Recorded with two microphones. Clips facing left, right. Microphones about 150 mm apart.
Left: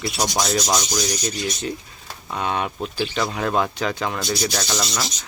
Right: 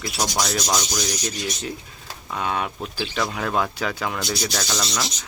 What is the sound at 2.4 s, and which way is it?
Speech, centre (ahead or behind).